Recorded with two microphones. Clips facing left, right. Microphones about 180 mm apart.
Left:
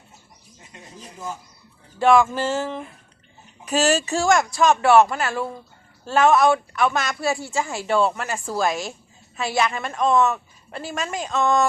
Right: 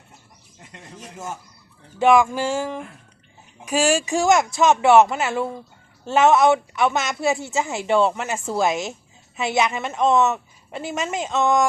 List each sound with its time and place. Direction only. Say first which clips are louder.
0.7 s speech: right 2 dB; 75° right (ahead or behind)
2.0 s a sound: right 1 dB; 15° right (ahead or behind)
4.5 s speech: right 1 dB; 20° right (ahead or behind)